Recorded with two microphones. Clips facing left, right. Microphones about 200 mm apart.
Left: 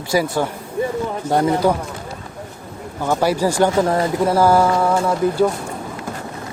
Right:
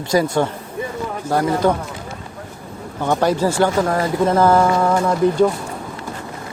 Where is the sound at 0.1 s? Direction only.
10° left (ahead or behind).